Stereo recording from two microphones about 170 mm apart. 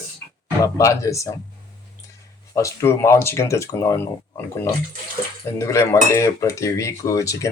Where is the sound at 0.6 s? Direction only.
20° left (ahead or behind).